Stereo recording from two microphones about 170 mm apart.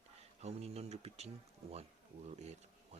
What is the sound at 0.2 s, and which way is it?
Speech, 40° right (ahead or behind).